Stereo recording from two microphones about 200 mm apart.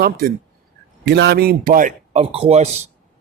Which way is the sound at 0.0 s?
50° right (ahead or behind).